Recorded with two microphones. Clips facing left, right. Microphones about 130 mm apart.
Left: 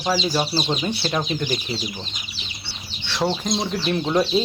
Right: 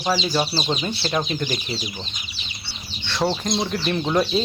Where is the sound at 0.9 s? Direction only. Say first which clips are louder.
Left 2 dB; 15° left (ahead or behind).